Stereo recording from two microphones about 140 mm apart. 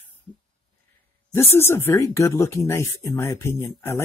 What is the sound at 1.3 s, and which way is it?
Speech, 15° left (ahead or behind).